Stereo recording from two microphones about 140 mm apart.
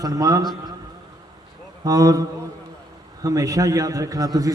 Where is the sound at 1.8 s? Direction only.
25° right (ahead or behind).